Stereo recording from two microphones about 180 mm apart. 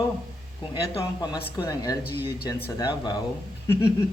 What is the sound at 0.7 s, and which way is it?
A man's voice, 25° left (ahead or behind).